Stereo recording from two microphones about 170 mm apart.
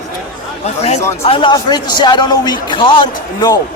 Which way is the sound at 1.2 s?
30° left (ahead or behind).